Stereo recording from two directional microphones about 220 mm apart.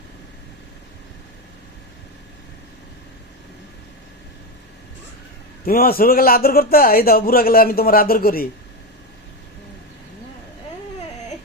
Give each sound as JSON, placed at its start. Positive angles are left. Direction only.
{"t": 5.6, "sound": "speech", "side_deg": 40}